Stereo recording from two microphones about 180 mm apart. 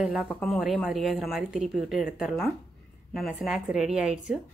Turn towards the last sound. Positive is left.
turn(degrees=-5)  # may be behind; listen again after turning